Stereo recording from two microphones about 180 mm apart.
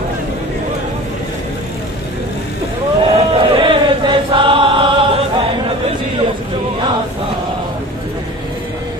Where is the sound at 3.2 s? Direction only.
30° right (ahead or behind).